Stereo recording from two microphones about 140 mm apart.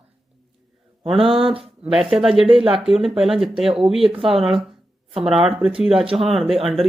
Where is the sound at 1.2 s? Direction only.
40° right (ahead or behind).